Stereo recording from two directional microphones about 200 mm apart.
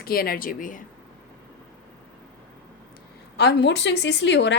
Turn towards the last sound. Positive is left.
turn(degrees=65)  # may be behind; listen again after turning